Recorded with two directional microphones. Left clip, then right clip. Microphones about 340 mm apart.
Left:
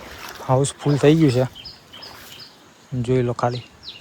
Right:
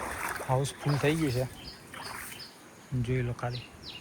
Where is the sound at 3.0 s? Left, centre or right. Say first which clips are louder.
Left 14 dB; centre.